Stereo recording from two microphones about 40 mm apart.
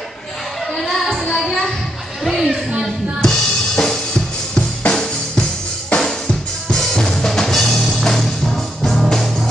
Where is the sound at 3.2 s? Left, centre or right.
Centre.